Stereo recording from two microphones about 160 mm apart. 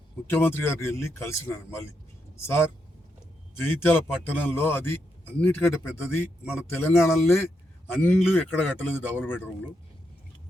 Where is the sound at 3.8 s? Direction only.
10° left (ahead or behind).